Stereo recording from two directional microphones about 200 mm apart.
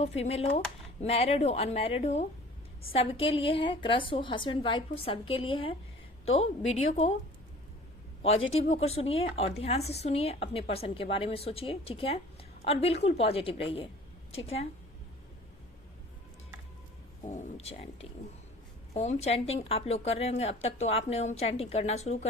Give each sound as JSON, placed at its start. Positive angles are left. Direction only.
{"t": 0.0, "sound": "a woman's voice", "side_deg": 30}
{"t": 8.5, "sound": "a woman's voice", "side_deg": 30}
{"t": 17.2, "sound": "a woman's voice", "side_deg": 35}